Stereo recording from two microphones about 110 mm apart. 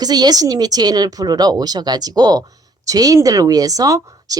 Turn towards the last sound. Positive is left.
turn(degrees=-30)  # may be behind; listen again after turning